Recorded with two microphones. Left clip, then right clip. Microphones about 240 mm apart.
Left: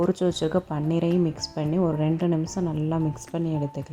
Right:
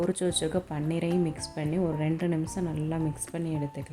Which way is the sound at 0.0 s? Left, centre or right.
Left.